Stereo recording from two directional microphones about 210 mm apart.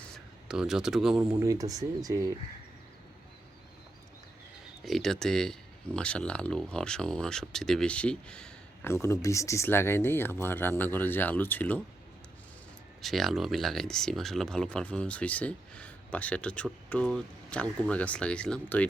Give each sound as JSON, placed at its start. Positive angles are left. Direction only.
{"t": 0.0, "sound": "a sound", "side_deg": -5}
{"t": 1.2, "sound": "speech", "side_deg": -15}
{"t": 4.8, "sound": "speech", "side_deg": 0}
{"t": 13.0, "sound": "speech", "side_deg": 0}